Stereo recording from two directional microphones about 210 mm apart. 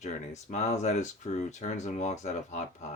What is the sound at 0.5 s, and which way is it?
Speech, 30° left (ahead or behind).